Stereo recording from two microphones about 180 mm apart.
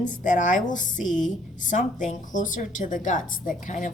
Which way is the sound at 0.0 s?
45° left (ahead or behind).